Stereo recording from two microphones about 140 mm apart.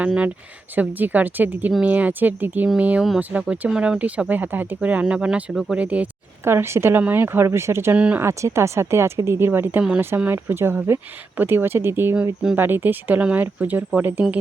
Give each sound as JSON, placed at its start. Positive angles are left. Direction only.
{"t": 0.0, "sound": "speech", "side_deg": -10}